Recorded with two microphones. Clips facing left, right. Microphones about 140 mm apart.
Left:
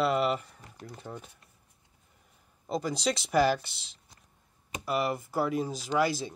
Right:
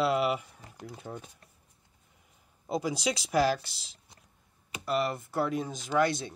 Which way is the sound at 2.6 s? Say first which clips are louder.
Even; 5° right (ahead or behind).